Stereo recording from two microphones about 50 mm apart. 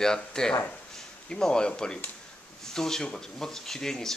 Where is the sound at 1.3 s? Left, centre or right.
Centre.